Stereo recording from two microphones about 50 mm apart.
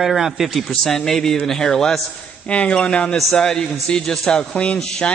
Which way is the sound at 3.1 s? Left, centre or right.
Centre.